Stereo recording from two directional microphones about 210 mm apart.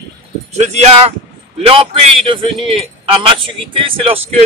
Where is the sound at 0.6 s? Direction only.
35° right (ahead or behind).